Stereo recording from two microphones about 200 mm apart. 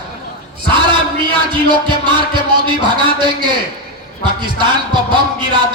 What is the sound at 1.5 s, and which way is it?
Music, 25° right (ahead or behind).